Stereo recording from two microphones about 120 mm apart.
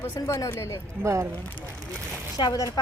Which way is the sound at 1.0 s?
25° right (ahead or behind).